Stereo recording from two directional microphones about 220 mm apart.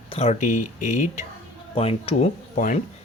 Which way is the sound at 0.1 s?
30° left (ahead or behind).